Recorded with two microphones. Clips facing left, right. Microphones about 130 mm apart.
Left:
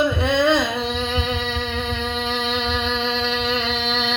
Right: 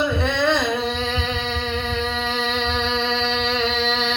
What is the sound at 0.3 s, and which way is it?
Singing, 15° left (ahead or behind).